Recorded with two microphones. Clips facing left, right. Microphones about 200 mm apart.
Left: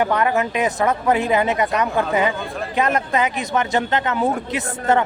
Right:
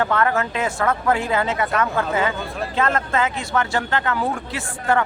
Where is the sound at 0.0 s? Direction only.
15° left (ahead or behind).